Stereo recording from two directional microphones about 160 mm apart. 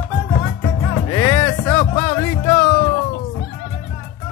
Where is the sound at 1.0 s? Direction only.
20° left (ahead or behind).